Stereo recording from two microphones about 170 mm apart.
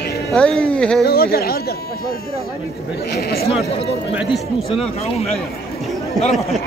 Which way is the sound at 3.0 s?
70° left (ahead or behind).